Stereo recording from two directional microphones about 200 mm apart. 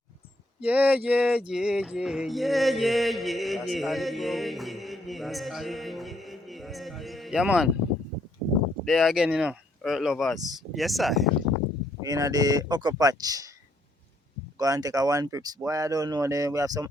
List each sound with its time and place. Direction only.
0.6 s mantra: 5° right (ahead or behind)
8.8 s mantra: centre (ahead or behind)
12.0 s speech: 15° right (ahead or behind)
14.6 s speech: 15° right (ahead or behind)